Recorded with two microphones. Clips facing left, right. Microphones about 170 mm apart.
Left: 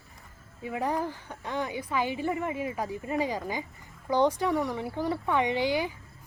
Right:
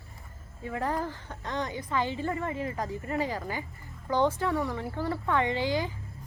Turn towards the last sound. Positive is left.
turn(degrees=15)  # may be behind; listen again after turning